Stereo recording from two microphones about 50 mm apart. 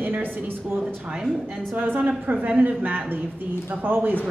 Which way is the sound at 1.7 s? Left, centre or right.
Right.